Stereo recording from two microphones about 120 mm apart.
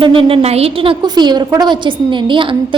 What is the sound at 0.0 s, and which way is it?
A woman's voice, 50° right (ahead or behind).